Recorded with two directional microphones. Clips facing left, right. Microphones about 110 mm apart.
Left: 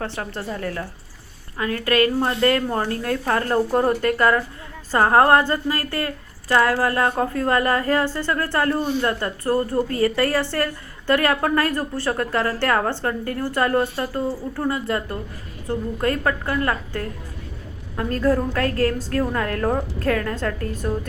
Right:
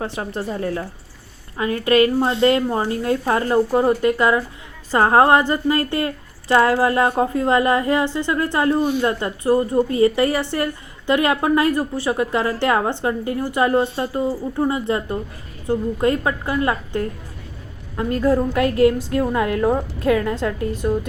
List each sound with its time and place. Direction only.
0.0 s a woman's voice: 15° right (ahead or behind)
3.7 s a woman's voice: 5° right (ahead or behind)
18.1 s a woman's voice: 15° right (ahead or behind)